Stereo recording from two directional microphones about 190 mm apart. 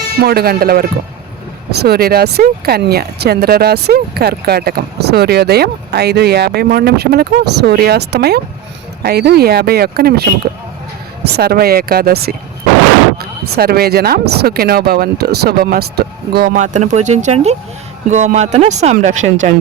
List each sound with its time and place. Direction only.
0.2 s speech: 55° right (ahead or behind)
11.3 s speech: 55° right (ahead or behind)